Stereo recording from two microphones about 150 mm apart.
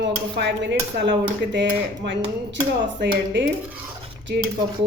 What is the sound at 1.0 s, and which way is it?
Speech, 90° right.